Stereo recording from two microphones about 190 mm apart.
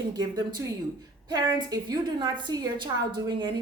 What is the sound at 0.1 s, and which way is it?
A woman's voice, 20° right (ahead or behind).